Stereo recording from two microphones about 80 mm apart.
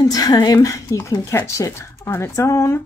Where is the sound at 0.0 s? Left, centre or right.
Left.